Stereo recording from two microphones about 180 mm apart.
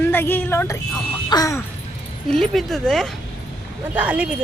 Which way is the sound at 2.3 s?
Centre (ahead or behind).